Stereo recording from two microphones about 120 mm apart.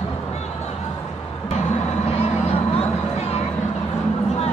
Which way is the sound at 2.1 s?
60° left (ahead or behind).